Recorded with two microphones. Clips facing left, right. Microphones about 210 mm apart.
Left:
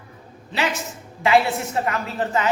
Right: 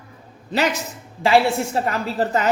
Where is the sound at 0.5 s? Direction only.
40° right (ahead or behind).